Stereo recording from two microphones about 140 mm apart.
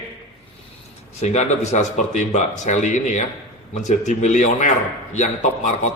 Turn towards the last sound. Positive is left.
turn(degrees=60)  # may be behind; listen again after turning